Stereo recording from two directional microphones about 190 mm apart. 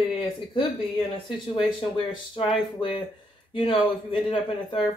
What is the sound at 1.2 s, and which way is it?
Speech, 25° left (ahead or behind).